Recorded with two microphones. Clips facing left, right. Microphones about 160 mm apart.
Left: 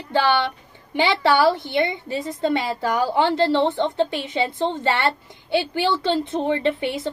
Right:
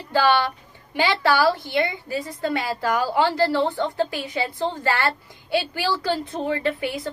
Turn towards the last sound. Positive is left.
turn(degrees=25)  # may be behind; listen again after turning